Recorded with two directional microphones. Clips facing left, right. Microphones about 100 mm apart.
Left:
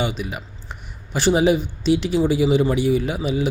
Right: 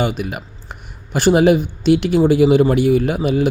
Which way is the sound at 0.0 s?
55° right (ahead or behind).